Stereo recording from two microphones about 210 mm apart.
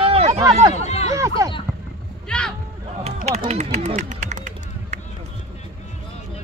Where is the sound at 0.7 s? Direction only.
30° left (ahead or behind).